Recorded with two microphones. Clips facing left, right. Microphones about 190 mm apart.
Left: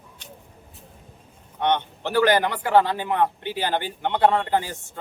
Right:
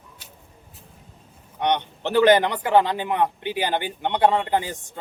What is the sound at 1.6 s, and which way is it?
A man's voice, 15° right (ahead or behind).